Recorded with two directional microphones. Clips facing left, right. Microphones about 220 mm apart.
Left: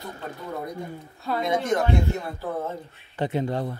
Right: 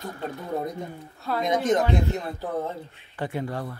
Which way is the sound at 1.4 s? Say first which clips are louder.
Right 2 dB; 20° right (ahead or behind).